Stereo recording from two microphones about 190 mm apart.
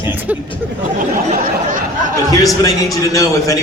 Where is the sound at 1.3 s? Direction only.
45° right (ahead or behind).